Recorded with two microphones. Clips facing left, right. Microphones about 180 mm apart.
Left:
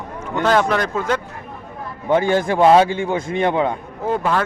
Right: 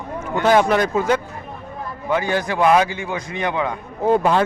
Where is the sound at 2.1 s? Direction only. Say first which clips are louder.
Left 4 dB; 25° left (ahead or behind).